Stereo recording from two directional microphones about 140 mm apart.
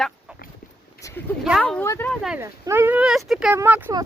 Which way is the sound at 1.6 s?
10° left (ahead or behind).